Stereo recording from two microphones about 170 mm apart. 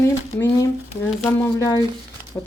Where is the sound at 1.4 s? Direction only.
20° left (ahead or behind).